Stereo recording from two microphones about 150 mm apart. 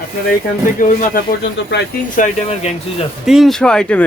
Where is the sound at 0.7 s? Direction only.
60° left (ahead or behind).